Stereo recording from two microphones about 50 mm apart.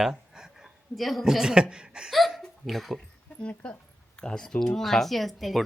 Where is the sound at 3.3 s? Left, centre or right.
Centre.